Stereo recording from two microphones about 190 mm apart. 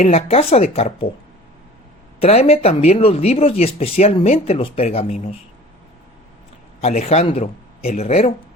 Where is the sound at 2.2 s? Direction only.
35° left (ahead or behind).